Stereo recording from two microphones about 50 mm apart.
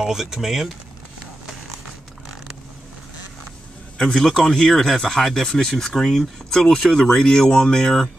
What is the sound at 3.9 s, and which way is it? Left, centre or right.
Speech, centre.